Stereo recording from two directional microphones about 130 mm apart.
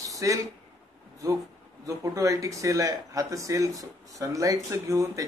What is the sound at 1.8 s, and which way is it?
Speech, 25° right (ahead or behind).